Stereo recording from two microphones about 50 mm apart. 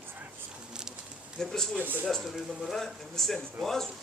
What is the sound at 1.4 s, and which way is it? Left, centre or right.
Speech, centre.